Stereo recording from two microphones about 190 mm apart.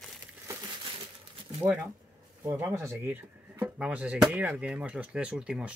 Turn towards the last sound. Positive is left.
turn(degrees=-5)  # may be behind; listen again after turning